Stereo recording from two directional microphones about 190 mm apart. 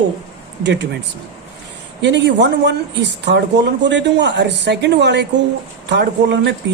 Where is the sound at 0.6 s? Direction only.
65° right (ahead or behind).